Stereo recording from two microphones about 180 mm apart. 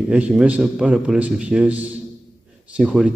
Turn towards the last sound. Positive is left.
turn(degrees=-5)  # may be behind; listen again after turning